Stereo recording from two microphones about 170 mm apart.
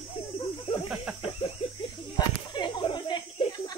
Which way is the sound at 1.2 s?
35° left (ahead or behind).